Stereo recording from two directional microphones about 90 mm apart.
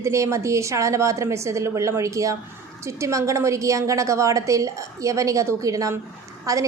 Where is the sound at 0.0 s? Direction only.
35° right (ahead or behind).